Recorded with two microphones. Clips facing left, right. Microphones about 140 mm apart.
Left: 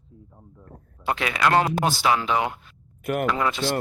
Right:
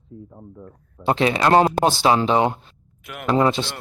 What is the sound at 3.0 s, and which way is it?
Speech, 50° left (ahead or behind).